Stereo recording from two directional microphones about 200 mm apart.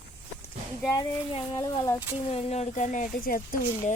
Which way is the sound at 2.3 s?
30° left (ahead or behind).